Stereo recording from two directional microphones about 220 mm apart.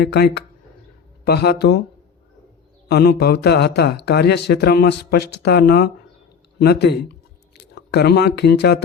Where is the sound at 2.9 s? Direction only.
50° left (ahead or behind).